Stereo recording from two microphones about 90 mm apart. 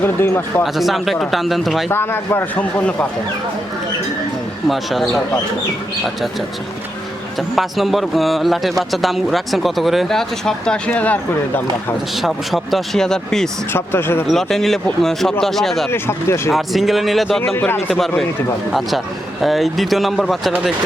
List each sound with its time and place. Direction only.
0.0 s a man's voice: 25° left (ahead or behind)
0.6 s speech: centre (ahead or behind)
1.9 s a man's voice: 25° left (ahead or behind)
4.7 s speech: centre (ahead or behind)
7.5 s speech: centre (ahead or behind); by 11.9 s 20° left (ahead or behind)
12.1 s speech: centre (ahead or behind)
13.7 s a man's voice: 25° left (ahead or behind)
14.3 s speech: 5° left (ahead or behind)
15.9 s a man's voice: 30° left (ahead or behind)
16.5 s speech: centre (ahead or behind)